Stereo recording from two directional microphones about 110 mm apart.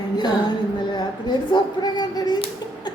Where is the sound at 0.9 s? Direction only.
40° left (ahead or behind).